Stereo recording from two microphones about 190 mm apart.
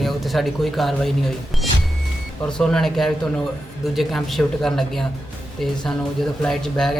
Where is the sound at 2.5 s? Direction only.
5° left (ahead or behind).